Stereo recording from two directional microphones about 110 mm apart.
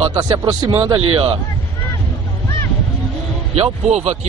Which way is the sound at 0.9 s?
55° right (ahead or behind).